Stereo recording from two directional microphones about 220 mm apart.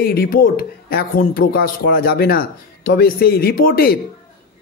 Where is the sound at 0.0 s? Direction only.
45° left (ahead or behind).